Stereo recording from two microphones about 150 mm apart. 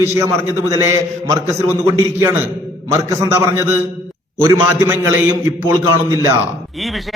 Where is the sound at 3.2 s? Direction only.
20° right (ahead or behind).